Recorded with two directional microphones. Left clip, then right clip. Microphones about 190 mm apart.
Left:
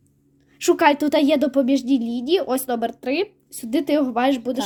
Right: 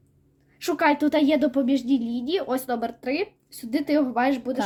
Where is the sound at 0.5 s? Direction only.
40° left (ahead or behind).